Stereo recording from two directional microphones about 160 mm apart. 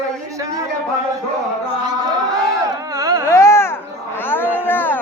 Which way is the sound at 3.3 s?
15° left (ahead or behind).